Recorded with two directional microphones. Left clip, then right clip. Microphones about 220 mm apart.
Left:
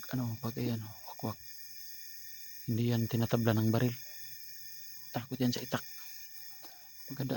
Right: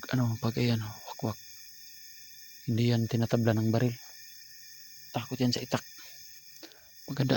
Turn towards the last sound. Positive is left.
turn(degrees=-35)  # may be behind; listen again after turning